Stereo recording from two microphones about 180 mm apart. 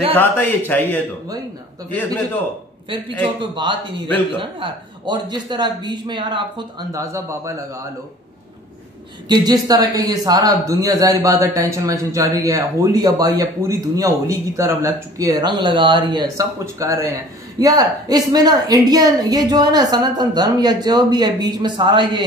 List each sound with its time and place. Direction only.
0.1 s a man's voice: 10° left (ahead or behind)
2.9 s speech: 30° right (ahead or behind)
9.3 s speech: 20° right (ahead or behind)